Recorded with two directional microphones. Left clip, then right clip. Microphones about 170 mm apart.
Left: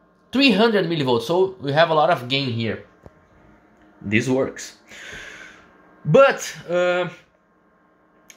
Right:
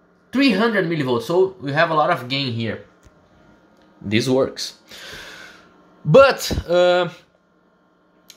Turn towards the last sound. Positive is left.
turn(degrees=-15)  # may be behind; listen again after turning